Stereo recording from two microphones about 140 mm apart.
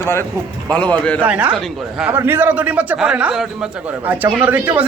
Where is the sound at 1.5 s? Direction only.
Centre (ahead or behind).